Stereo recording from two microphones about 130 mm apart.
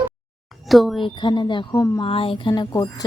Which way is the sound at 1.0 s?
40° left (ahead or behind).